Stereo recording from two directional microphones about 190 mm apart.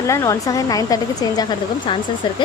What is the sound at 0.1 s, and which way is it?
A woman's voice, 15° left (ahead or behind).